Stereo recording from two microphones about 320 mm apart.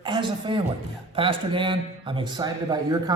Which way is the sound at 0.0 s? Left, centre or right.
Centre.